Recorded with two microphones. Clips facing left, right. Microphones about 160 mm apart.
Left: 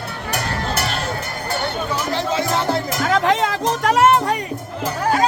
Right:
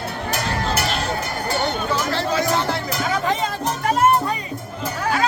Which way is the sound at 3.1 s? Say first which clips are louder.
Left 6 dB; 90° left.